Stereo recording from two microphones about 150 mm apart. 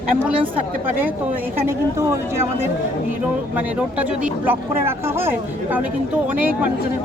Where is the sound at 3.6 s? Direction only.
10° right (ahead or behind).